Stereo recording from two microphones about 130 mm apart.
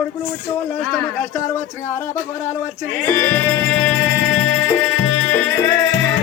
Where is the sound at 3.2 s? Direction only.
15° left (ahead or behind).